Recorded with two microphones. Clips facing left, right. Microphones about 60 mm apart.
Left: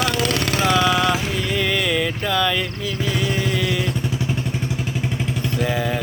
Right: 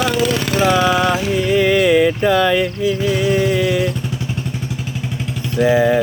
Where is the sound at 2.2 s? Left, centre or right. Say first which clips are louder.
Right 7 dB; right.